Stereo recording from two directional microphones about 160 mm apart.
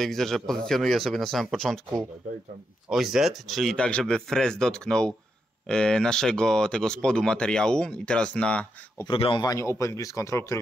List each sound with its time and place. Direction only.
0.0 s speech: centre (ahead or behind)
2.9 s speech: centre (ahead or behind)
9.0 s speech: 30° left (ahead or behind)